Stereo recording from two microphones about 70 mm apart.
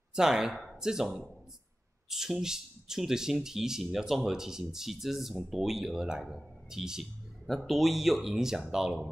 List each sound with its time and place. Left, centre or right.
0.1 s speech: centre